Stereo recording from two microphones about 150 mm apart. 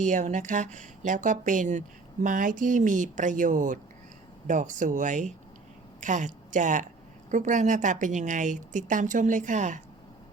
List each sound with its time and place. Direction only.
0.0 s a woman's voice: 55° right (ahead or behind)